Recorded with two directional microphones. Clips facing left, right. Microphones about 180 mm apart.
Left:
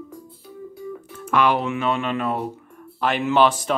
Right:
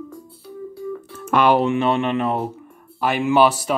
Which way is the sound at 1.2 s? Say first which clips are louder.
Right 4 dB; 35° right (ahead or behind).